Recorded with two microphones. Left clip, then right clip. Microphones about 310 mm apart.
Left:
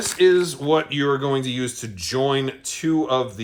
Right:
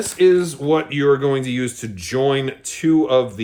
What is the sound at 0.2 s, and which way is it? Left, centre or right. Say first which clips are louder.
Speech: right 2 dB; centre.